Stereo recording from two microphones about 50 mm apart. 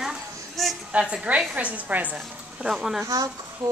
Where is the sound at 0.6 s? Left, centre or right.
Centre.